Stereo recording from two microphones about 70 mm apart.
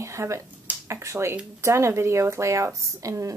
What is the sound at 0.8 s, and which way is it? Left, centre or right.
Speech, right.